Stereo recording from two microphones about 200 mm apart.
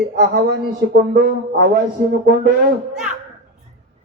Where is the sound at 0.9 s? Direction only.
50° right (ahead or behind).